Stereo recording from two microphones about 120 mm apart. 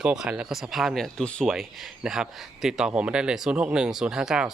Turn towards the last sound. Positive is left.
turn(degrees=-5)  # may be behind; listen again after turning